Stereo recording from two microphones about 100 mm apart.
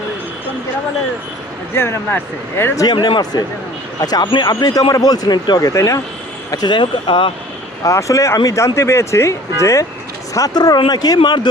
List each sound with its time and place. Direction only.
1.7 s speech: 25° left (ahead or behind)
2.7 s speech: 40° left (ahead or behind)
6.5 s speech: 45° left (ahead or behind)
7.9 s speech: 35° left (ahead or behind)